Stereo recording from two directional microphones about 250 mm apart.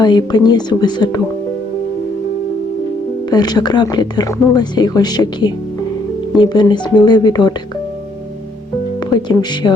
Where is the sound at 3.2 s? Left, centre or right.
Centre.